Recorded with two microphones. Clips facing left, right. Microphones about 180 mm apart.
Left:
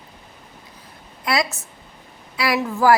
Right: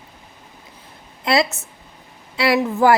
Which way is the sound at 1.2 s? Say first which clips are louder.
Right 4 dB; 25° right (ahead or behind).